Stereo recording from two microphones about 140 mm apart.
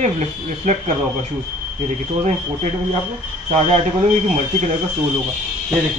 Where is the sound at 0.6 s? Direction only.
55° right (ahead or behind).